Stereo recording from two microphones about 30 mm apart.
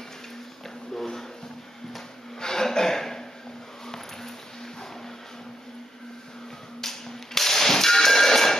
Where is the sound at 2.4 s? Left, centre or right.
Centre.